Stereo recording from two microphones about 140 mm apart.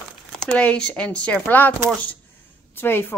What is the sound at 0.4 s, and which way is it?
Speech, 10° left (ahead or behind).